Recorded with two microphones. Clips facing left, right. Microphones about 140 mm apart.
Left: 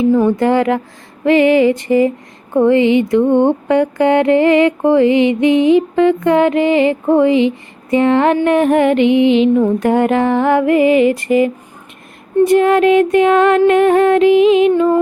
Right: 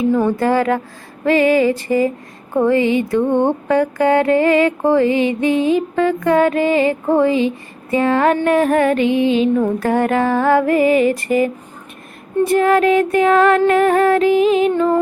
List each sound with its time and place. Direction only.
0.0 s mantra: 20° left (ahead or behind)